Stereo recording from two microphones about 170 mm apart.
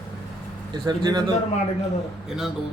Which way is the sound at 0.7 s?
25° right (ahead or behind).